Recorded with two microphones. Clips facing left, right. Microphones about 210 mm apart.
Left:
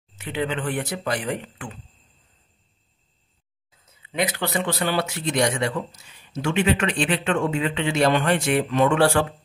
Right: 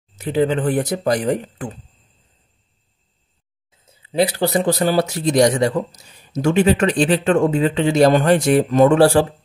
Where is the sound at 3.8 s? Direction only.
30° right (ahead or behind).